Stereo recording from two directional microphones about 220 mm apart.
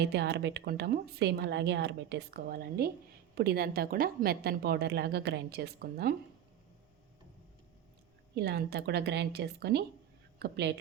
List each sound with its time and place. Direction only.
0.0 s speech: 50° right (ahead or behind)
8.4 s speech: 50° right (ahead or behind)